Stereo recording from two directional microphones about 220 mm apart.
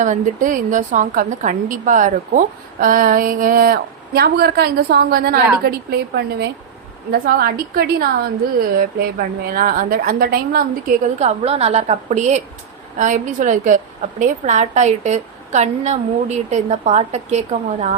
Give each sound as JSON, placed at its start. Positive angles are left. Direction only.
{"t": 0.0, "sound": "a woman's voice", "side_deg": -35}